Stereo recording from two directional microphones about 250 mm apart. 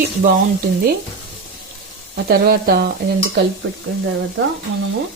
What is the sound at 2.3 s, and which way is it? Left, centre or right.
Speech, right.